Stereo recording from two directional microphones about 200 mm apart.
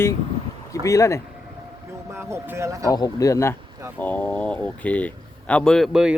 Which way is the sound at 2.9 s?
15° left (ahead or behind).